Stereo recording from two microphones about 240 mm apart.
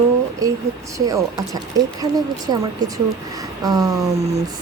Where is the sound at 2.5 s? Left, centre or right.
Centre.